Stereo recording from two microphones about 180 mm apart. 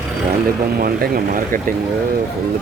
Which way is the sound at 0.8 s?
55° right (ahead or behind).